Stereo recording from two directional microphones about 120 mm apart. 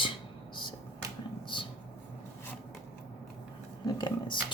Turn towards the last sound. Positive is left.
turn(degrees=40)  # may be behind; listen again after turning